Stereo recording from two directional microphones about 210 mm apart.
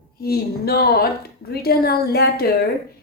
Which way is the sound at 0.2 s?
50° left (ahead or behind).